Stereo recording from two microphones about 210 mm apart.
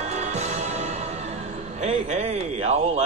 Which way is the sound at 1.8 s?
30° right (ahead or behind).